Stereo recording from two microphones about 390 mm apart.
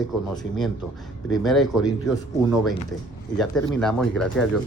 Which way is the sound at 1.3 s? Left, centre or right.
Centre.